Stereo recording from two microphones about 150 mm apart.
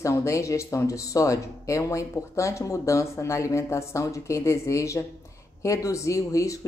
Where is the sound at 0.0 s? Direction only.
20° left (ahead or behind).